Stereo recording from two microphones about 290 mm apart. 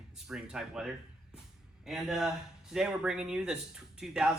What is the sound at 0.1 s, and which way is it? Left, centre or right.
Speech, centre.